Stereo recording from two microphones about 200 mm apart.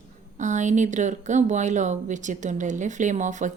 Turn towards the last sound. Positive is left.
turn(degrees=-40)  # may be behind; listen again after turning